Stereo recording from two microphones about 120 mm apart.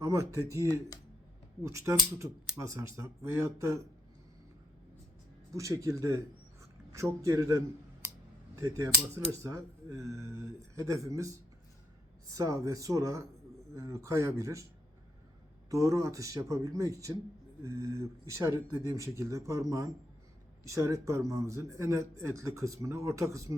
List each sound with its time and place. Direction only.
0.0 s speech: 25° right (ahead or behind)
1.6 s speech: 25° right (ahead or behind)
5.5 s speech: 25° right (ahead or behind)
12.3 s speech: 30° right (ahead or behind)
15.7 s speech: 25° right (ahead or behind)